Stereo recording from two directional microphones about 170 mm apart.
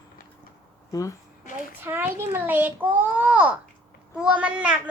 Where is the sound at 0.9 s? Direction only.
20° left (ahead or behind).